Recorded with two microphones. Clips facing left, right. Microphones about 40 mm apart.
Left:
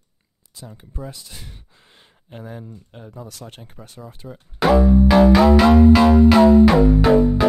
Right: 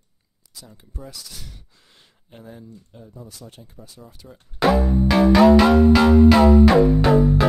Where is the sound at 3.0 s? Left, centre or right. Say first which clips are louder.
Left 5 dB; left.